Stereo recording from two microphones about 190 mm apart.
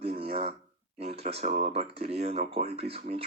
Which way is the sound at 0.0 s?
30° right (ahead or behind).